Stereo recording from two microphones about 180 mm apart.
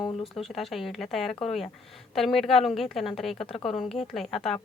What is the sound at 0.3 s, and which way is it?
A woman's voice, centre (ahead or behind).